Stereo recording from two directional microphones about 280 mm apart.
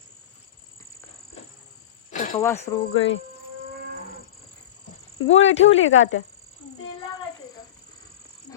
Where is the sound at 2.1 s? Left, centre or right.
Left.